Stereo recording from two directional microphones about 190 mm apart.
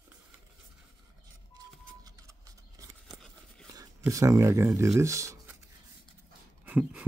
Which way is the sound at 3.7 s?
15° right (ahead or behind).